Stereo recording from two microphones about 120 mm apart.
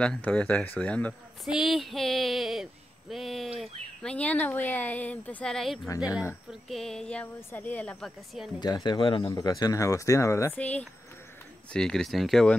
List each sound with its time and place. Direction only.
0.0 s speech: 10° left (ahead or behind)
1.4 s speech: centre (ahead or behind); by 8.0 s 15° left (ahead or behind)
8.5 s speech: 35° left (ahead or behind)
9.2 s speech: 30° left (ahead or behind)
10.5 s speech: 10° left (ahead or behind)